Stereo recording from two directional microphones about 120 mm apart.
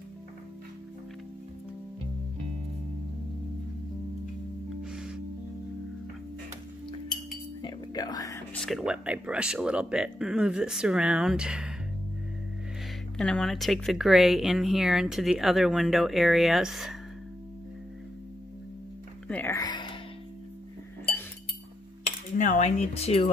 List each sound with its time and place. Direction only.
4.9 s music: 5° right (ahead or behind)
7.6 s music: 35° left (ahead or behind)
8.6 s speech: 5° right (ahead or behind)
13.2 s speech: 5° left (ahead or behind)
19.2 s music: 10° left (ahead or behind)
19.5 s music: 35° left (ahead or behind)
22.4 s speech: 80° left; by 23.3 s 60° left (ahead or behind)